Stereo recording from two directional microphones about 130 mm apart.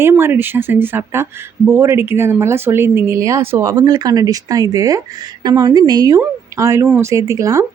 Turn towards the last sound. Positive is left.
turn(degrees=-25)  # may be behind; listen again after turning